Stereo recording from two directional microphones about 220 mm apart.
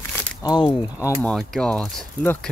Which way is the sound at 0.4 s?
20° left (ahead or behind).